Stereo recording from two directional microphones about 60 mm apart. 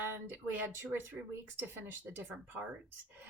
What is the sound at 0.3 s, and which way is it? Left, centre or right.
A woman's voice, right.